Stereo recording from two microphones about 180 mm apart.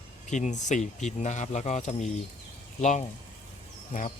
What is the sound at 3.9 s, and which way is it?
Speech, 45° left (ahead or behind).